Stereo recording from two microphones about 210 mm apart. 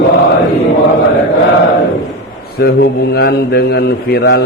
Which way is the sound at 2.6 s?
45° left (ahead or behind).